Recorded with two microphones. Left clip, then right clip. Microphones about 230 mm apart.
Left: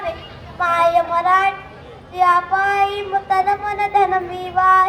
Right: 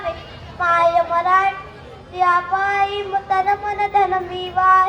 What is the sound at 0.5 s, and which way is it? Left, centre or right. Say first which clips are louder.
Child singing: even; left.